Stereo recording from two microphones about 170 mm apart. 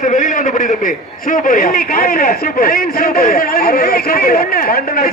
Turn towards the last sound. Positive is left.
turn(degrees=60)  # may be behind; listen again after turning